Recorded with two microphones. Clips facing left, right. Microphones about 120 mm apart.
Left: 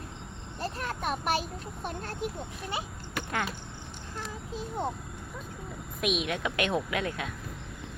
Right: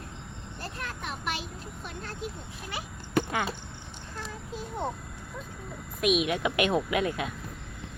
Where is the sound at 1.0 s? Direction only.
45° left (ahead or behind).